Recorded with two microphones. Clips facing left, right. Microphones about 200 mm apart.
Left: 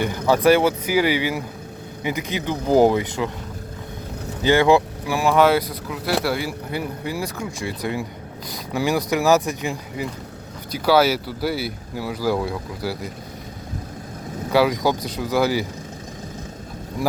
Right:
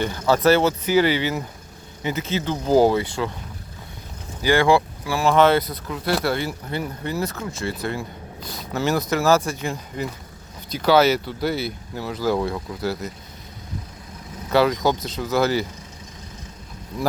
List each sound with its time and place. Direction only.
0.3 s speech: 10° left (ahead or behind)
4.4 s speech: 20° left (ahead or behind)
14.5 s speech: 10° left (ahead or behind)